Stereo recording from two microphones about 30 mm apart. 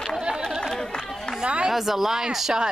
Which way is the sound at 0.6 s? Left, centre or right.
Centre.